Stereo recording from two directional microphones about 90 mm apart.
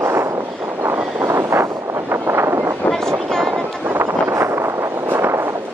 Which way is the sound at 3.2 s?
Centre (ahead or behind).